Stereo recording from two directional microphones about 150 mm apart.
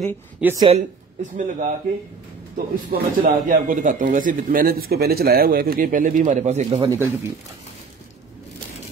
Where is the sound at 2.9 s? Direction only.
75° right (ahead or behind).